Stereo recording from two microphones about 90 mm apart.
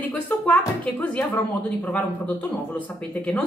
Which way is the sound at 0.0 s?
20° left (ahead or behind).